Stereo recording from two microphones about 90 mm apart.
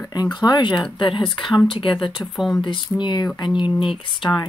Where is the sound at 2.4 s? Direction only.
Centre (ahead or behind).